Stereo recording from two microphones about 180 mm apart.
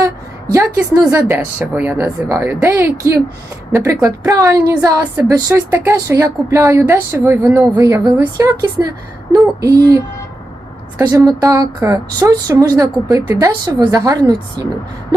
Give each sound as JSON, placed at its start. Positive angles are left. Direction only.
{"t": 0.0, "sound": "a woman's voice", "side_deg": -20}
{"t": 9.3, "sound": "speech", "side_deg": -20}
{"t": 11.0, "sound": "speech", "side_deg": -20}